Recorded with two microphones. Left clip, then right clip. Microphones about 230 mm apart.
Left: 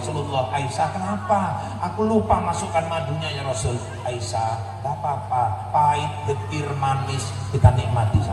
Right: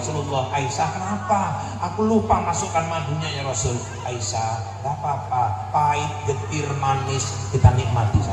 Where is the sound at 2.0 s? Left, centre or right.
Left.